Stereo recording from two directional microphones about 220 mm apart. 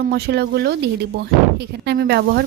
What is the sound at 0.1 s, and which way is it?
A woman's voice, 45° right (ahead or behind).